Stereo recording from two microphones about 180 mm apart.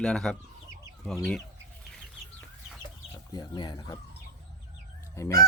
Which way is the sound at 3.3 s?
25° left (ahead or behind).